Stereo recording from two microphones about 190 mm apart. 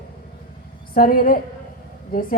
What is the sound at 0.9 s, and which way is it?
A woman's voice, 50° left (ahead or behind).